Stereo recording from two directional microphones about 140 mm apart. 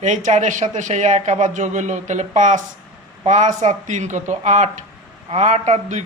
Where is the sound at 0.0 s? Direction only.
60° right (ahead or behind).